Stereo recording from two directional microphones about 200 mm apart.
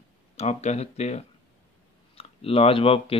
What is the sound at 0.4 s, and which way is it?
Speech, 35° left (ahead or behind).